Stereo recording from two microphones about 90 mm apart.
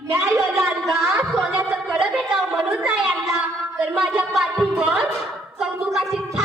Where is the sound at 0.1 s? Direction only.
30° right (ahead or behind).